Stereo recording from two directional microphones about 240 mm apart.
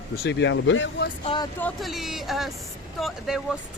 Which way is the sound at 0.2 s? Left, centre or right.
Left.